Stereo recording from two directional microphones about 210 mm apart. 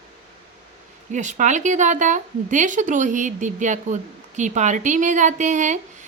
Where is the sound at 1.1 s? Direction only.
35° right (ahead or behind).